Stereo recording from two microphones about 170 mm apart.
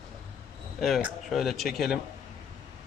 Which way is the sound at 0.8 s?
5° right (ahead or behind).